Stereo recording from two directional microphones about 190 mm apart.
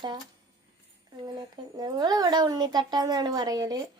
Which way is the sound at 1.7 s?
20° right (ahead or behind).